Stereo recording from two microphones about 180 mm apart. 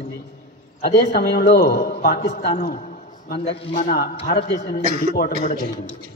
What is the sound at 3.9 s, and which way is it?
A man's voice, 60° left (ahead or behind).